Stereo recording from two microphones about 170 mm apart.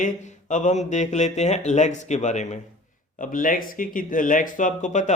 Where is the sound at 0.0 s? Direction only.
45° left (ahead or behind).